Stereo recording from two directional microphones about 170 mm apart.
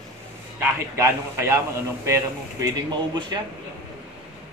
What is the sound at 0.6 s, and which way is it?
A man's voice, 15° right (ahead or behind).